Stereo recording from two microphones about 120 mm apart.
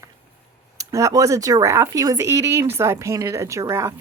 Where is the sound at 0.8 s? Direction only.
25° right (ahead or behind).